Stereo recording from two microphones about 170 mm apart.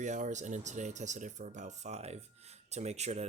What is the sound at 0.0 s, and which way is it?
Speech, 45° right (ahead or behind).